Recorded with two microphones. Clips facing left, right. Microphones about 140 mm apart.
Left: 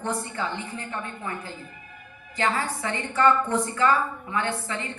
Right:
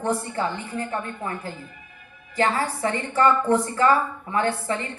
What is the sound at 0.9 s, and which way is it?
A woman's voice, 40° right (ahead or behind).